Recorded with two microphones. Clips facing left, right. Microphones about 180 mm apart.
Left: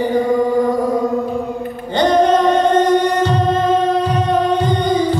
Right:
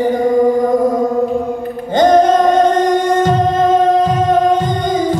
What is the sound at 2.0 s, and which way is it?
Music, 45° right (ahead or behind).